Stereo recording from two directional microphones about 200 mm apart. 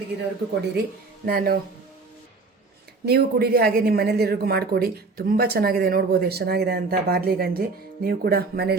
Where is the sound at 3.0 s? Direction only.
50° right (ahead or behind).